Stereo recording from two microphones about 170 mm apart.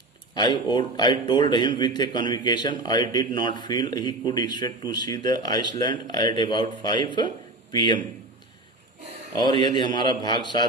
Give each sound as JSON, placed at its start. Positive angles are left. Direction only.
{"t": 0.3, "sound": "a man's voice", "side_deg": 25}
{"t": 9.4, "sound": "a man's voice", "side_deg": 25}